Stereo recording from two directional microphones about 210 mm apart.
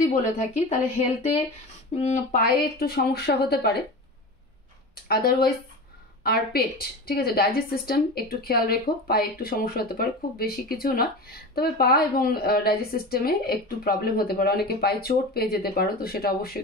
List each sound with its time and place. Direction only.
0.1 s a woman's voice: 35° left (ahead or behind)
5.0 s a woman's voice: 45° left (ahead or behind)